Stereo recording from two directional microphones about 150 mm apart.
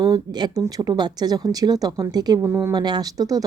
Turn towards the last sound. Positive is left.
turn(degrees=-25)  # may be behind; listen again after turning